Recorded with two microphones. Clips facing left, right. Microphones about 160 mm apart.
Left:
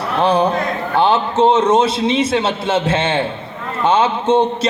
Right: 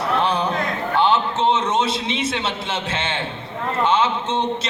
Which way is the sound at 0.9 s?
40° left (ahead or behind).